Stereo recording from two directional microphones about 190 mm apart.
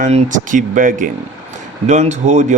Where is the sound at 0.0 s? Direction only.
40° right (ahead or behind).